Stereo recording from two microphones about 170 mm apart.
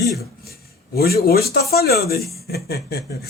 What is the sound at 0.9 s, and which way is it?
Speech, 65° left (ahead or behind).